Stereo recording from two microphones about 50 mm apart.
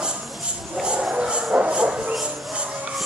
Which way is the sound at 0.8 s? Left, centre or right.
Centre.